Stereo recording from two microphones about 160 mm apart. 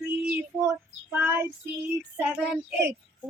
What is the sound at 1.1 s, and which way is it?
Child singing, 15° right (ahead or behind).